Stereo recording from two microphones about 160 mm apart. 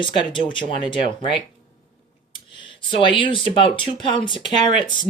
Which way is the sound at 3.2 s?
30° left (ahead or behind).